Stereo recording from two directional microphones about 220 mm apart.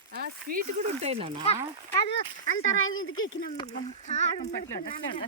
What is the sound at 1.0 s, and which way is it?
Speech, 25° right (ahead or behind).